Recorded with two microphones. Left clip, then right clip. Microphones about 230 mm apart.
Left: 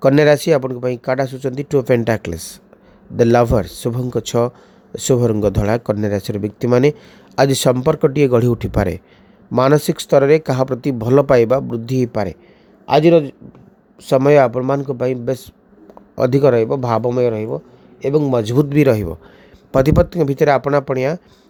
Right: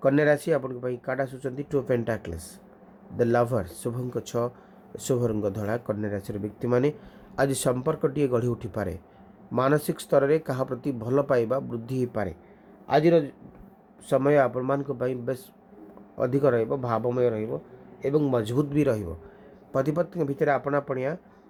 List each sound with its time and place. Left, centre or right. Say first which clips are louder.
0.0 s a man's voice: left 10 dB; left